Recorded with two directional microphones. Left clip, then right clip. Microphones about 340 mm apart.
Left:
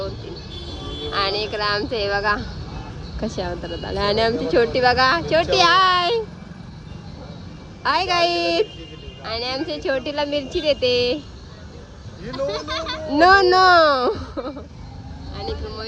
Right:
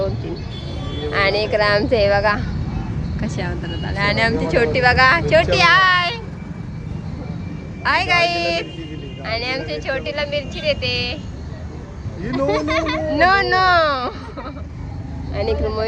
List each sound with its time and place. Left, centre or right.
1.1 s speech: centre
7.9 s a woman's voice: centre
12.5 s speech: centre
13.1 s speech: left